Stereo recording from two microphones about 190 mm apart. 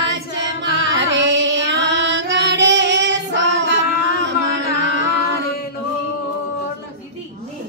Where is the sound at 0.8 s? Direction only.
75° right (ahead or behind).